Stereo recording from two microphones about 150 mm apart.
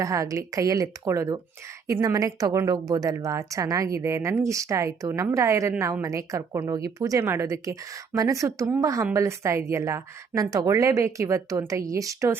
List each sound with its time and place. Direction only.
0.0 s a woman's voice: 20° right (ahead or behind)